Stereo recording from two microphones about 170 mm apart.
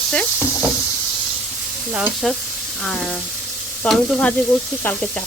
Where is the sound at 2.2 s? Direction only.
5° left (ahead or behind).